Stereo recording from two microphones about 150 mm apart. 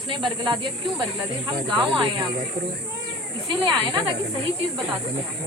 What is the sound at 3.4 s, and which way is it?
Speech, 30° right (ahead or behind).